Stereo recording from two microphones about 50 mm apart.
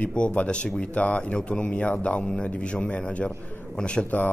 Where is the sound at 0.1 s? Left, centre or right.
Left.